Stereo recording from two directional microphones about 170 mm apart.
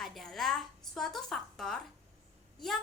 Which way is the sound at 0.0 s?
Centre (ahead or behind).